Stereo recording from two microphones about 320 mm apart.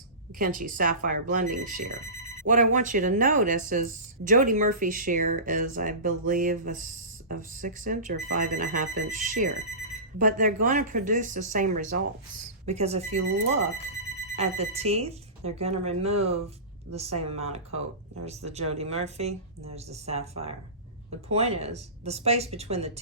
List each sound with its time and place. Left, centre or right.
0.3 s speech: right